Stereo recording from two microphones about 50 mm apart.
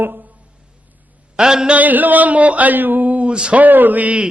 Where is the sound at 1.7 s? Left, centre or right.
Right.